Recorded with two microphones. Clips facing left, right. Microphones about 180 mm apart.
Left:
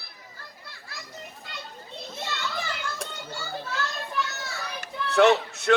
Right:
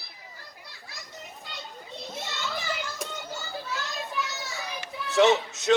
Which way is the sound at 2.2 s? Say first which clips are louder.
Left 4 dB; 60° left (ahead or behind).